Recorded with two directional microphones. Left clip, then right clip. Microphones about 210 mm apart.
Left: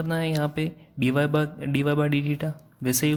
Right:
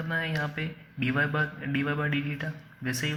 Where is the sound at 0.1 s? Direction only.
60° left (ahead or behind).